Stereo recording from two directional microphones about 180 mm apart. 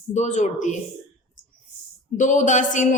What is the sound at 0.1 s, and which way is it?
Speech, 40° left (ahead or behind).